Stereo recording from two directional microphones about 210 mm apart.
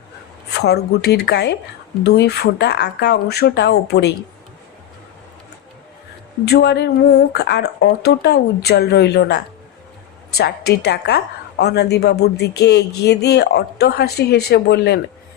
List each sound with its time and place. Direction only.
0.5 s a woman's voice: 50° left (ahead or behind)
6.4 s a woman's voice: 50° left (ahead or behind)